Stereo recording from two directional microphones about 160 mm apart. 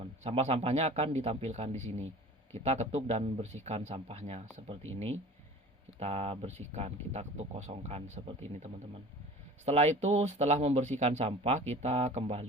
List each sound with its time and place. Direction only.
0.0 s speech: 40° right (ahead or behind)